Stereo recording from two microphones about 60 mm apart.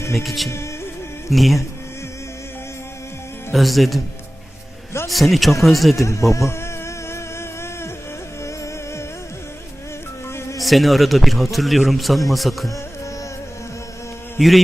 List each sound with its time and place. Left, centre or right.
0.1 s a man's voice: centre
3.5 s a man's voice: centre
5.0 s a man's voice: centre
6.0 s speech: left
6.3 s a sound: left
8.4 s music: left
10.3 s music: left
10.6 s a man's voice: centre
14.3 s a man's voice: centre